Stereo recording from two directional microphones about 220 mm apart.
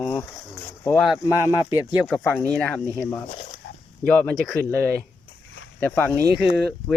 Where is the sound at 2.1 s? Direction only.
5° left (ahead or behind).